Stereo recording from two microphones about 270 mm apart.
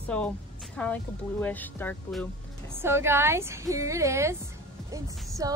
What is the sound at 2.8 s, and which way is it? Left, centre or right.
A woman's voice, centre.